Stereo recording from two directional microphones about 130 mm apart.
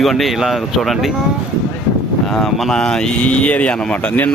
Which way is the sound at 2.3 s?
5° left (ahead or behind).